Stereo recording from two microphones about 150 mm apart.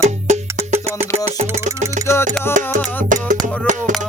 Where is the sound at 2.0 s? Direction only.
55° right (ahead or behind).